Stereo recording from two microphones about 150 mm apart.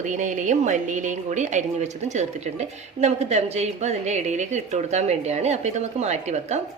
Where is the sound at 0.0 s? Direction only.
55° right (ahead or behind).